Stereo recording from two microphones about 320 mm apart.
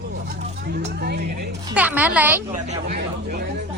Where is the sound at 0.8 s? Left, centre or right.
Right.